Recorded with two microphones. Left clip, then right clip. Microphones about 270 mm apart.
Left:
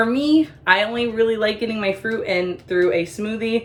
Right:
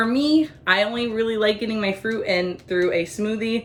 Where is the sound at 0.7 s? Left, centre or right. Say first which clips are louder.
Left 2 dB; left.